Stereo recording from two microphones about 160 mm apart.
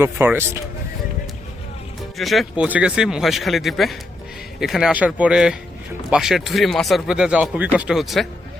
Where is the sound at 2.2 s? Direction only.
Centre (ahead or behind).